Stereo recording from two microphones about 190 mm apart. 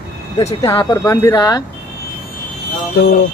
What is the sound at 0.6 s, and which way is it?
Speech, 20° left (ahead or behind).